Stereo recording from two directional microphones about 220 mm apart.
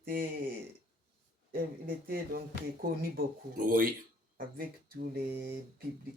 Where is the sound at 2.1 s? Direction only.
40° right (ahead or behind).